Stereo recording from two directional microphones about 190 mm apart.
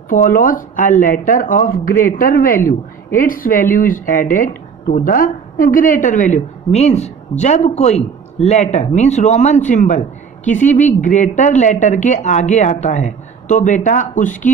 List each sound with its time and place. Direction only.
0.1 s speech: 45° left (ahead or behind)